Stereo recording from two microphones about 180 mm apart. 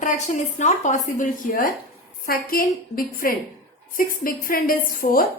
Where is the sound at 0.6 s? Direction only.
40° left (ahead or behind).